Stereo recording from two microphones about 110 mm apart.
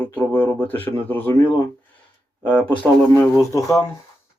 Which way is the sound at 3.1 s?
25° left (ahead or behind).